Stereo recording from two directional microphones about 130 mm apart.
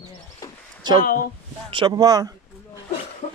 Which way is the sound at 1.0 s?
90° left.